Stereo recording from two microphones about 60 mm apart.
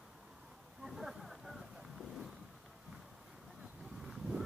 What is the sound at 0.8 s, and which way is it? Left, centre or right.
Boat, centre.